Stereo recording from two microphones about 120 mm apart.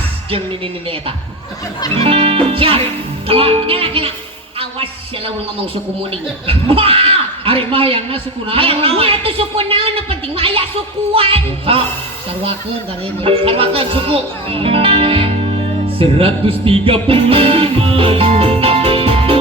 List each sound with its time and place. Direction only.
0.3 s speech: 50° right (ahead or behind)
13.2 s speech: 50° right (ahead or behind)